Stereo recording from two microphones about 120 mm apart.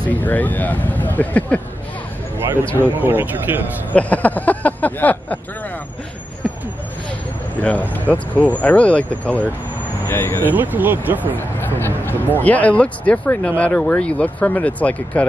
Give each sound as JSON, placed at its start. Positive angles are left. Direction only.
{"t": 0.1, "sound": "speech", "side_deg": 15}
{"t": 2.6, "sound": "speech", "side_deg": 15}
{"t": 3.0, "sound": "speech", "side_deg": -15}
{"t": 3.9, "sound": "speech", "side_deg": 10}
{"t": 7.6, "sound": "speech", "side_deg": 15}
{"t": 10.5, "sound": "speech", "side_deg": -15}
{"t": 11.3, "sound": "speech", "side_deg": 20}